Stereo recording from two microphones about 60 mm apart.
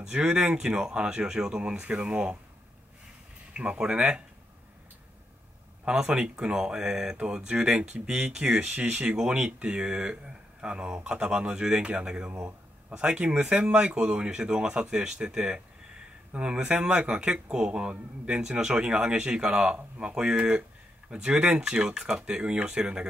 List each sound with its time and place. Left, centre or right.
0.0 s speech: centre
3.5 s speech: centre
5.9 s speech: centre